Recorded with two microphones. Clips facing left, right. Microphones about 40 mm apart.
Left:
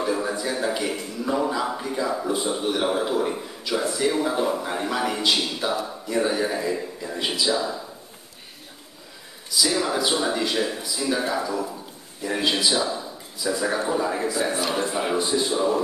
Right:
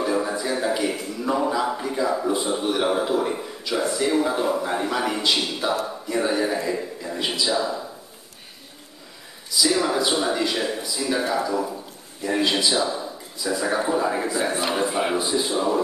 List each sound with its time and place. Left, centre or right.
0.0 s speech: centre
9.5 s a man's voice: centre
15.2 s speech: centre